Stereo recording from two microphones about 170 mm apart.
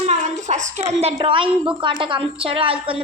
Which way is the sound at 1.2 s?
30° right (ahead or behind).